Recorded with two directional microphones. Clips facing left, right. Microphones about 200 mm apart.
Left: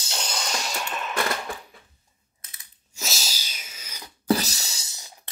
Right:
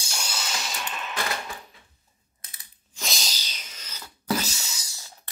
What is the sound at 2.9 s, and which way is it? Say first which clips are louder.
Sneeze: even; 5° left (ahead or behind).